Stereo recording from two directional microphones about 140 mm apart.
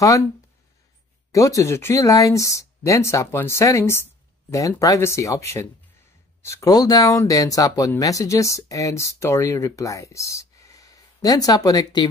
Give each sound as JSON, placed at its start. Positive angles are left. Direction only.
{"t": 1.3, "sound": "speech", "side_deg": 25}